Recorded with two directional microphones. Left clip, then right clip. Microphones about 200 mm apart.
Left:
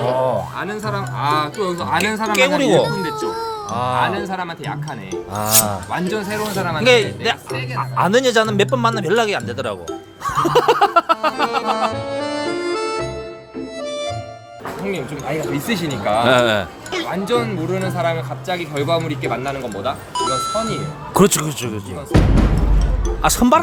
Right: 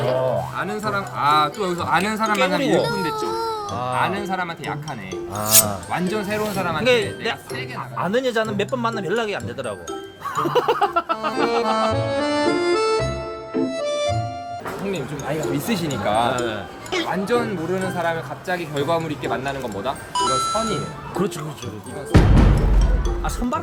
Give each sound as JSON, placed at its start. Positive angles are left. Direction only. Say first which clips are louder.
{"t": 0.0, "sound": "a child's voice", "louder": "left 3 dB", "side_deg": 0}
{"t": 5.9, "sound": "speech", "louder": "left 2 dB", "side_deg": 0}
{"t": 6.8, "sound": "speech", "louder": "left 6 dB", "side_deg": 20}
{"t": 11.6, "sound": "accordion", "louder": "even", "side_deg": 0}
{"t": 13.6, "sound": "music", "louder": "right 3 dB", "side_deg": 0}
{"t": 14.9, "sound": "speech", "louder": "left 2 dB", "side_deg": 0}
{"t": 16.3, "sound": "speech", "louder": "left 10 dB", "side_deg": 40}
{"t": 17.1, "sound": "speech", "louder": "left 3 dB", "side_deg": 10}
{"t": 20.1, "sound": "speech", "louder": "even", "side_deg": 0}
{"t": 21.2, "sound": "speech", "louder": "left 11 dB", "side_deg": 50}
{"t": 22.1, "sound": "speech", "louder": "left 1 dB", "side_deg": 0}
{"t": 23.2, "sound": "speech", "louder": "left 13 dB", "side_deg": 45}